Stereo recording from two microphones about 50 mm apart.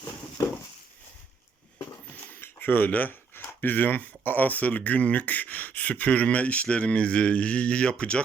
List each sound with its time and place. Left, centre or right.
2.4 s speech: left